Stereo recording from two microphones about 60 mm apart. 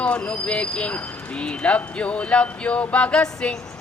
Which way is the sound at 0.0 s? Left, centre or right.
Centre.